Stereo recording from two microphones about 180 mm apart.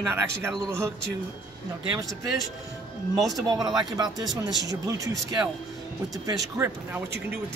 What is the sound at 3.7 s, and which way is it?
Speech, 20° right (ahead or behind).